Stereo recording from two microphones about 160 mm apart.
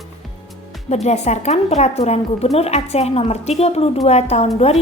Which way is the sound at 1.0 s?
45° left (ahead or behind).